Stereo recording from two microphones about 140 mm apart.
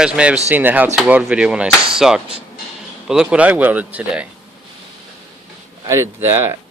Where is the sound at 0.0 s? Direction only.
10° right (ahead or behind).